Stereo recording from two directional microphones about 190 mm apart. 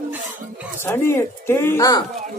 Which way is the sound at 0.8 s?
10° left (ahead or behind).